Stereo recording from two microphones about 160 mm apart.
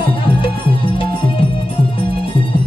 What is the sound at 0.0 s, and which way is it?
Music, 35° left (ahead or behind).